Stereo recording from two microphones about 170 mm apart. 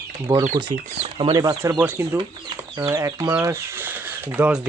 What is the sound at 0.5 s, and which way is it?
Speech, 30° right (ahead or behind).